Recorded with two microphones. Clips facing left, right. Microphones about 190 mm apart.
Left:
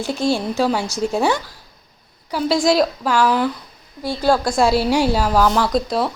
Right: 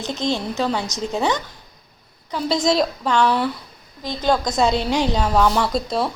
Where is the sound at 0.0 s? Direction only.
20° right (ahead or behind).